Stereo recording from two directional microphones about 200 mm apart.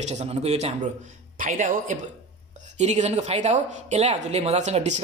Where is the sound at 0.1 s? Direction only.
30° right (ahead or behind).